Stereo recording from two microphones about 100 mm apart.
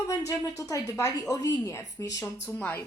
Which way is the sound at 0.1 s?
35° left (ahead or behind).